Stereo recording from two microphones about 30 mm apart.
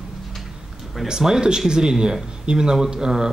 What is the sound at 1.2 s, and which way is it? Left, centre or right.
Speech, right.